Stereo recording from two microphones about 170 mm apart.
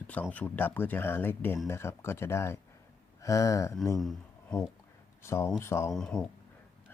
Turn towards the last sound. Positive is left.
turn(degrees=5)  # may be behind; listen again after turning